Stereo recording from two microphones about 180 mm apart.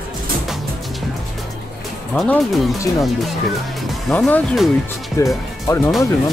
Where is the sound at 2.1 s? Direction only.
5° left (ahead or behind).